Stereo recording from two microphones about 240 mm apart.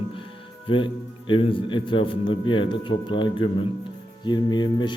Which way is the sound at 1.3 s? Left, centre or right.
Left.